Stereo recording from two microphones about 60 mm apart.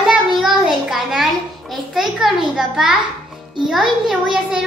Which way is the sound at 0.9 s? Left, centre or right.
Centre.